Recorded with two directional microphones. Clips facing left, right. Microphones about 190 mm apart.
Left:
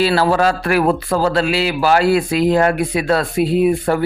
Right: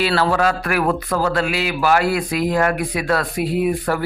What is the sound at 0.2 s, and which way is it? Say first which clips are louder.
Speech: left 3 dB; 30° left (ahead or behind).